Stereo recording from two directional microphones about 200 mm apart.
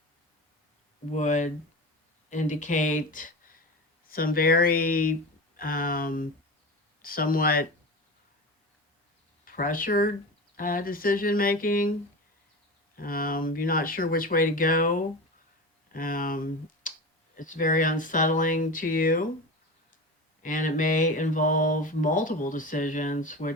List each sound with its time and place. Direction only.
1.1 s speech: 35° left (ahead or behind)
9.4 s speech: 45° left (ahead or behind)
13.0 s speech: 45° left (ahead or behind)
20.4 s speech: 40° left (ahead or behind)